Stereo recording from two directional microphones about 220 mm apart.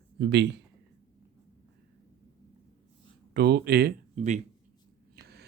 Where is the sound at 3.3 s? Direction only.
50° right (ahead or behind).